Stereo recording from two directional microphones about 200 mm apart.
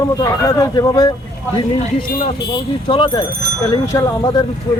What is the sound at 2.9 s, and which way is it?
Speech, 25° left (ahead or behind).